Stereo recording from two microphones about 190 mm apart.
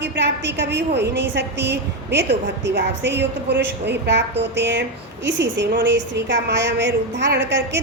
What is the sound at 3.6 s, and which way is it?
A woman's voice, 65° right (ahead or behind).